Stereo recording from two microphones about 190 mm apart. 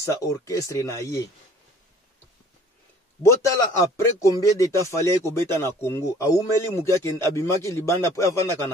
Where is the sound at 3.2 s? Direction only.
15° left (ahead or behind).